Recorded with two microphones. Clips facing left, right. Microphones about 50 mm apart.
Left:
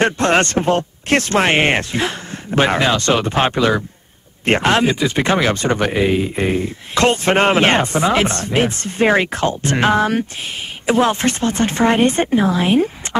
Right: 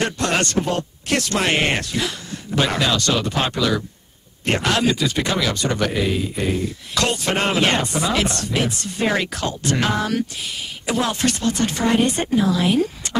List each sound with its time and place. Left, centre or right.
0.0 s speech: left